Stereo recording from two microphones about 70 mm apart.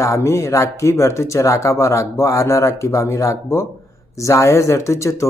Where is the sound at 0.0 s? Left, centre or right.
Left.